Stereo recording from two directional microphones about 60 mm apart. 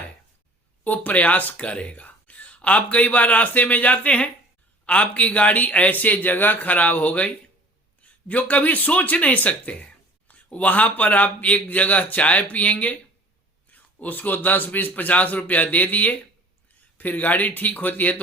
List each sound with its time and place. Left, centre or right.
0.9 s speech: left